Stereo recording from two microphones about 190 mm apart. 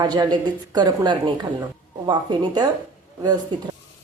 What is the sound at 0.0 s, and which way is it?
Speech, 20° right (ahead or behind).